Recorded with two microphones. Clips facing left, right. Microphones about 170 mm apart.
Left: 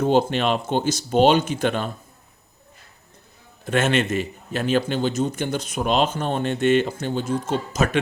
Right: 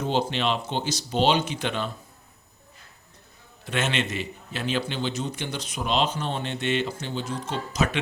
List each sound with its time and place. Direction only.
0.0 s a man's voice: 50° left (ahead or behind)
3.7 s a man's voice: 50° left (ahead or behind)